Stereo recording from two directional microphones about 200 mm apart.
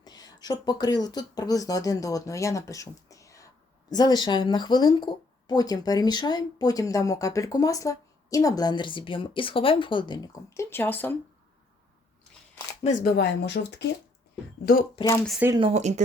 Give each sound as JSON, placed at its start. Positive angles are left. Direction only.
{"t": 0.0, "sound": "speech", "side_deg": 20}
{"t": 12.8, "sound": "speech", "side_deg": 45}
{"t": 14.6, "sound": "speech", "side_deg": 50}
{"t": 15.0, "sound": "speech", "side_deg": 15}
{"t": 15.3, "sound": "speech", "side_deg": -10}
{"t": 15.5, "sound": "speech", "side_deg": -30}